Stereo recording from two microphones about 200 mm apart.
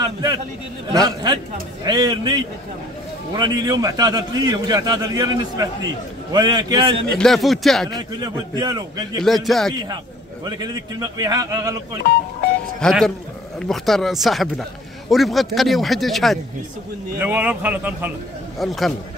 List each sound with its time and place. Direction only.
0.0 s a sound: 20° right (ahead or behind)
0.9 s a man's voice: 20° right (ahead or behind)
7.2 s a man's voice: centre (ahead or behind)
7.9 s a man's voice: 20° right (ahead or behind)
9.2 s a man's voice: centre (ahead or behind)
10.4 s a man's voice: 20° right (ahead or behind)
12.8 s a man's voice: centre (ahead or behind)